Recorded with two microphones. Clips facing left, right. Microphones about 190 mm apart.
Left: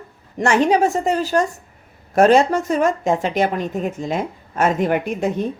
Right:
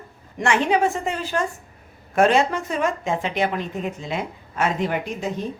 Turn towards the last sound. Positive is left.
turn(degrees=55)  # may be behind; listen again after turning